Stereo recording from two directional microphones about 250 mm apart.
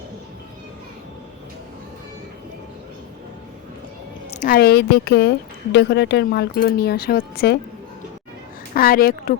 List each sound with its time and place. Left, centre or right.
4.4 s speech: left
8.7 s speech: left